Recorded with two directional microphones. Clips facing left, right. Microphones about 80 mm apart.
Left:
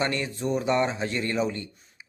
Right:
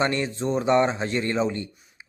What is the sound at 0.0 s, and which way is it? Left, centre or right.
Speech, right.